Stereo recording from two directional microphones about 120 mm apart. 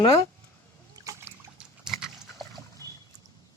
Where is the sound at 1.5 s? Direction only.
5° right (ahead or behind).